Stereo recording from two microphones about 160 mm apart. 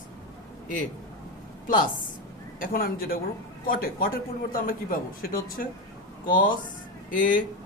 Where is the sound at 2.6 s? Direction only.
65° left (ahead or behind).